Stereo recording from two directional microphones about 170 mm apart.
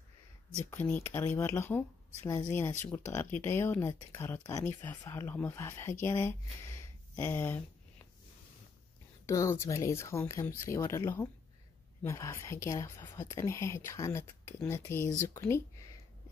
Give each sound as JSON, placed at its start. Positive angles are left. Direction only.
{"t": 0.7, "sound": "speech", "side_deg": 10}
{"t": 9.2, "sound": "speech", "side_deg": 20}